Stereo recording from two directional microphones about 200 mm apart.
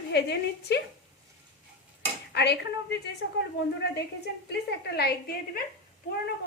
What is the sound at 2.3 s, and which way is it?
Speech, 55° left (ahead or behind).